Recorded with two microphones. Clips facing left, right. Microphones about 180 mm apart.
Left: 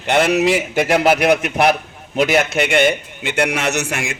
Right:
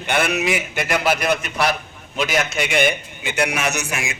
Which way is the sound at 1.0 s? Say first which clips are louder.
Left 6 dB; 60° left (ahead or behind).